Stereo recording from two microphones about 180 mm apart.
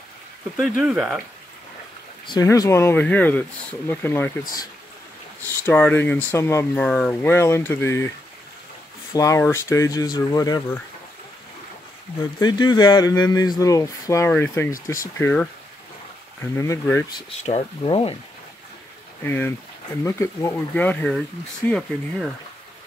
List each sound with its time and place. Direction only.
0.6 s speech: 5° right (ahead or behind)
2.2 s speech: 20° left (ahead or behind)
5.7 s speech: 10° left (ahead or behind)
9.1 s speech: 15° left (ahead or behind)
12.4 s speech: 25° left (ahead or behind)
17.5 s speech: 35° left (ahead or behind)
19.2 s speech: 10° left (ahead or behind)